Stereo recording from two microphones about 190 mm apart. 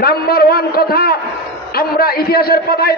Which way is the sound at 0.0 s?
55° left (ahead or behind).